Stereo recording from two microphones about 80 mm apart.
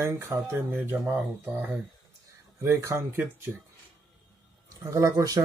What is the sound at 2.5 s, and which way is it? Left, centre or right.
Speech, right.